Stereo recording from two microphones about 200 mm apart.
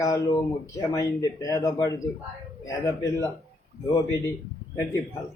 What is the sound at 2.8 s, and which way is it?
Speech, 15° left (ahead or behind).